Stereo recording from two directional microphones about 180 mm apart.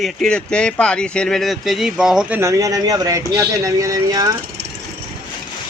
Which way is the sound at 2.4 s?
15° right (ahead or behind).